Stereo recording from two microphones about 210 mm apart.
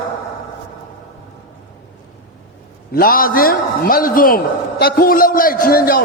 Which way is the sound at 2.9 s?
45° left (ahead or behind).